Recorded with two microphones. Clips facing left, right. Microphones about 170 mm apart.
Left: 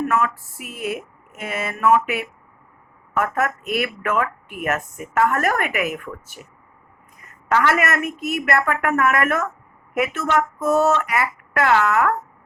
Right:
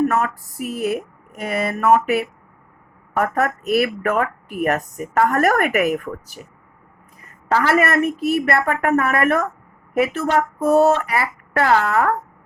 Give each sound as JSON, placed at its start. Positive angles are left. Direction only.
{"t": 0.0, "sound": "speech", "side_deg": -40}